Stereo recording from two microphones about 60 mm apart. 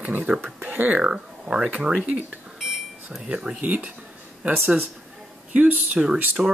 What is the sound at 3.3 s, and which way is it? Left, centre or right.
Speech, centre.